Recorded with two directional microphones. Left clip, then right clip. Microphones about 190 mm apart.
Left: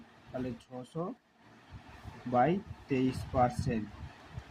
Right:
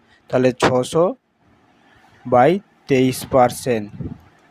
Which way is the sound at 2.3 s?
45° right (ahead or behind).